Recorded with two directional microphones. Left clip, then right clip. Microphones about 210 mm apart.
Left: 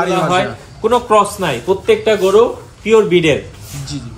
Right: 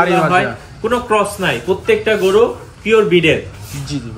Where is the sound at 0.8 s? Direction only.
35° left (ahead or behind).